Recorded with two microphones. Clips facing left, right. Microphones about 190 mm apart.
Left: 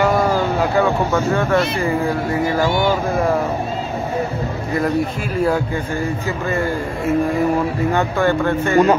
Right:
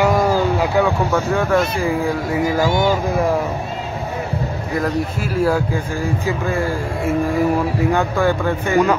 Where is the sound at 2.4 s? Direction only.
45° right (ahead or behind).